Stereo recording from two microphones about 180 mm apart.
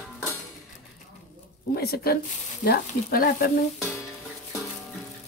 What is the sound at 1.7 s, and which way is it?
Frying, 60° left (ahead or behind).